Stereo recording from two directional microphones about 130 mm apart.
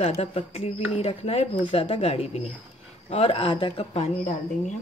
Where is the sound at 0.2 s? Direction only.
50° left (ahead or behind).